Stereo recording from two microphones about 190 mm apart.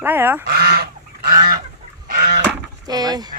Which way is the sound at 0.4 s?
55° right (ahead or behind).